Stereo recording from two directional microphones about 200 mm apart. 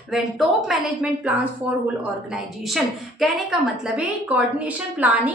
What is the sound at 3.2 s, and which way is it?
A woman's voice, centre (ahead or behind).